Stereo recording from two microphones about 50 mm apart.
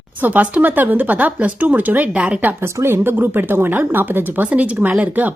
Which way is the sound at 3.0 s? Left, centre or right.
Right.